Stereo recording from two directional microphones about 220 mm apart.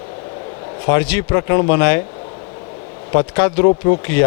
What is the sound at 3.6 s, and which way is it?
Speech, 30° left (ahead or behind).